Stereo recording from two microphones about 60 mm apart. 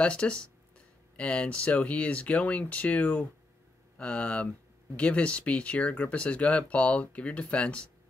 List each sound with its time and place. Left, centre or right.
0.0 s speech: centre